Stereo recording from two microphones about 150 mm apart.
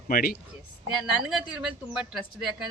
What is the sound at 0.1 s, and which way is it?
Speech, 90° left.